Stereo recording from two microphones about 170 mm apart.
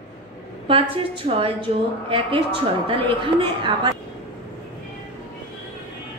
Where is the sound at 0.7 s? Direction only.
35° right (ahead or behind).